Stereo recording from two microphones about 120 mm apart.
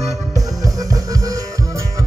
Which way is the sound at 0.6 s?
30° right (ahead or behind).